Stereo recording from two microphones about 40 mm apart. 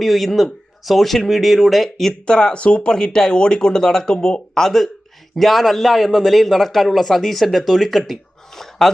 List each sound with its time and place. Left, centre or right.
0.0 s speech: centre
2.2 s speech: left
2.8 s speech: centre